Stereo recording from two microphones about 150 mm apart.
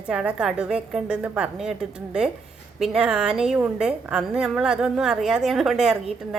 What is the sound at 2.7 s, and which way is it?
A woman's voice, 5° right (ahead or behind).